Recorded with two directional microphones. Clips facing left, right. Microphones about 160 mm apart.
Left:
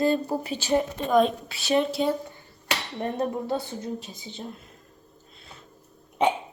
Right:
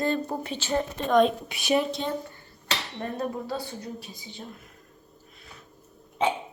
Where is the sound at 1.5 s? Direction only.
15° right (ahead or behind).